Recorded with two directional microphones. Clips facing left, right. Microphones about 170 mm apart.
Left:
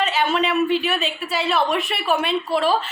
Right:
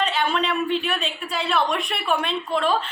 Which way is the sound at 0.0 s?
5° left (ahead or behind).